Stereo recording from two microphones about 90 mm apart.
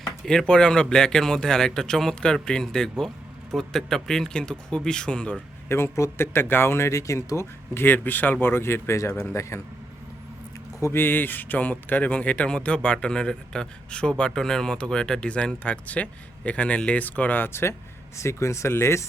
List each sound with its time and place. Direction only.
0.3 s speech: 5° left (ahead or behind)
5.6 s speech: 30° left (ahead or behind)
10.8 s speech: 30° left (ahead or behind)